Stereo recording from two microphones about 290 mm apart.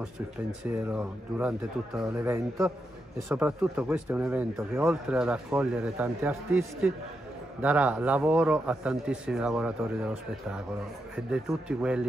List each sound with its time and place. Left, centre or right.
0.7 s speech: centre